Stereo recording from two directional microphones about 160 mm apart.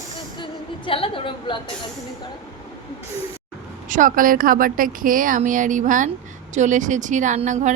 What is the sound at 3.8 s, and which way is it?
Speech, 55° right (ahead or behind).